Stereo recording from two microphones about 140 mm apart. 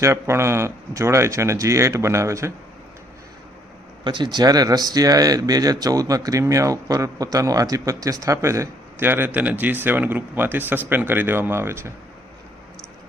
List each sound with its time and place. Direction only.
0.0 s speech: 20° right (ahead or behind)
4.0 s speech: 30° right (ahead or behind)